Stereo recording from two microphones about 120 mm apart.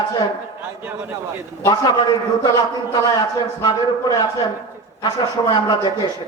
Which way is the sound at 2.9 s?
35° left (ahead or behind).